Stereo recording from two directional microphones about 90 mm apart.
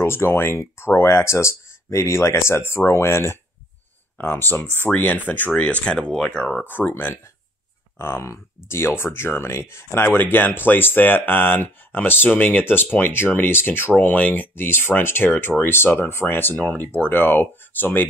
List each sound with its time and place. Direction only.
0.0 s speech: 25° left (ahead or behind)
4.6 s speech: 25° right (ahead or behind)
4.9 s speech: 15° left (ahead or behind)
6.6 s speech: 20° left (ahead or behind)